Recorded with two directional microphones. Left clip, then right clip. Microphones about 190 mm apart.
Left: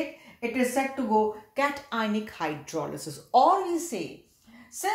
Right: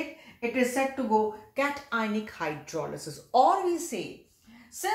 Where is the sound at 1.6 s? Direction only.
35° left (ahead or behind).